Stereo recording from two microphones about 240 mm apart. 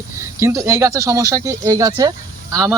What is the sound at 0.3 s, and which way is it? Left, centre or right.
Speech, centre.